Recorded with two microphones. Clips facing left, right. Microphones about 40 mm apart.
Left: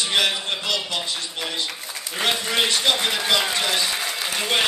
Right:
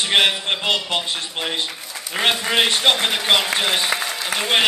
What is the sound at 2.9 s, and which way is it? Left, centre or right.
Speech, right.